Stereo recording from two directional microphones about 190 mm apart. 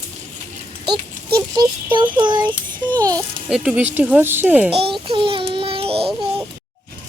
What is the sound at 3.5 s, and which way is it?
Speech, 5° right (ahead or behind).